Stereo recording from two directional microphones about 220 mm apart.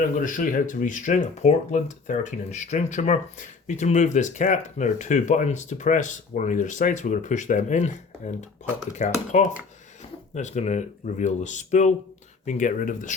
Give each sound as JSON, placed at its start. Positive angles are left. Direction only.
{"t": 0.2, "sound": "speech", "side_deg": 35}